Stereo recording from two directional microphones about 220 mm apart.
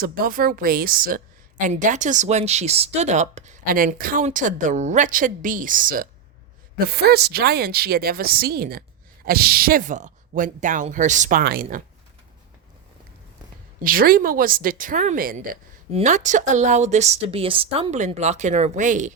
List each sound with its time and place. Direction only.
0.0 s speech: 40° right (ahead or behind)
13.8 s speech: 40° right (ahead or behind)
15.9 s speech: 30° right (ahead or behind)